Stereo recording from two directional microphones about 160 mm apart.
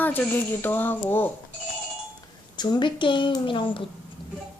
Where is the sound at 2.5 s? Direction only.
25° left (ahead or behind).